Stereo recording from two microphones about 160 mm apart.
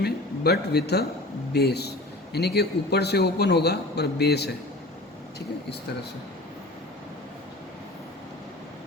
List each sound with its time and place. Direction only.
0.0 s a man's voice: 90° left